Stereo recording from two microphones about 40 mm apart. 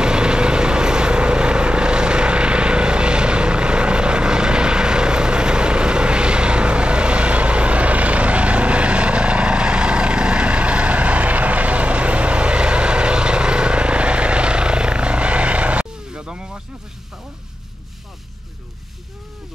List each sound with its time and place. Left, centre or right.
0.0 s vehicle: right